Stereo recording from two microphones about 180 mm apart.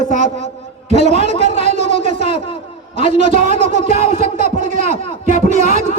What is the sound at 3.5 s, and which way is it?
Speech, 35° left (ahead or behind).